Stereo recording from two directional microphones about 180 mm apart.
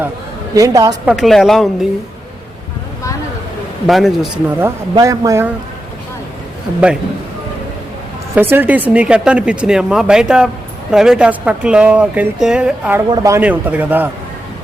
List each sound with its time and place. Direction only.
0.5 s a woman's voice: 20° right (ahead or behind)
1.0 s speech: centre (ahead or behind)
3.8 s speech: centre (ahead or behind)
4.6 s a man's voice: 20° right (ahead or behind)
8.4 s speech: 10° right (ahead or behind)
13.1 s a man's voice: 15° right (ahead or behind)